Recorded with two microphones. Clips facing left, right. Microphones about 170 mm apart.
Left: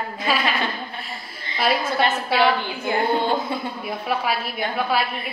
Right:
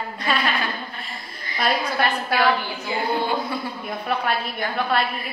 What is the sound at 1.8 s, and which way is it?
Speech, 20° left (ahead or behind).